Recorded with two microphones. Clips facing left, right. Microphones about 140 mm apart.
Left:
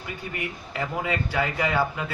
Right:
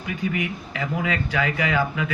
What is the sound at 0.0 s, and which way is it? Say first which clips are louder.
Speech: right 7 dB; 90° right.